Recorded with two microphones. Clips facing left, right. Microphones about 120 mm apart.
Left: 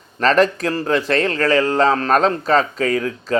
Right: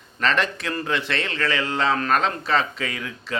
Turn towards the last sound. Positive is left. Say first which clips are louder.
# left 11 dB
turn(degrees=40)  # may be behind; listen again after turning